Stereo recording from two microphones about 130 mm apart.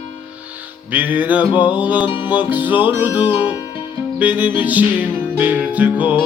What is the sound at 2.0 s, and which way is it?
Music, 35° left (ahead or behind).